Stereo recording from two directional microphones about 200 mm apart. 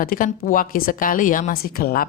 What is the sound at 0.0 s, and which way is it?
Speech, 45° left (ahead or behind).